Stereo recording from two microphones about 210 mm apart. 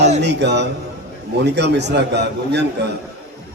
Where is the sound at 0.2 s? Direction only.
55° right (ahead or behind).